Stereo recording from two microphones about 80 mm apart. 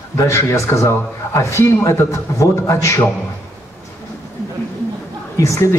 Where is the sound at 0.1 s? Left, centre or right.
Left.